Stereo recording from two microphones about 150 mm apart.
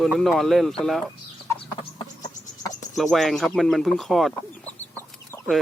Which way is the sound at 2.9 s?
Centre (ahead or behind).